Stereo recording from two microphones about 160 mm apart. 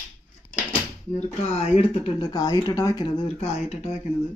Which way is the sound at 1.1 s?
45° left (ahead or behind).